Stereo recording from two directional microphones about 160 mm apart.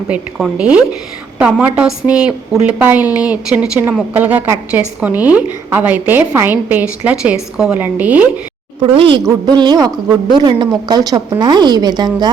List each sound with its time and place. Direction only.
0.1 s a woman's voice: 5° right (ahead or behind)
8.8 s a woman's voice: 30° right (ahead or behind)